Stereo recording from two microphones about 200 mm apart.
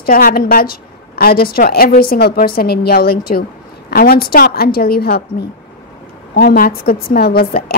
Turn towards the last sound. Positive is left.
turn(degrees=50)  # may be behind; listen again after turning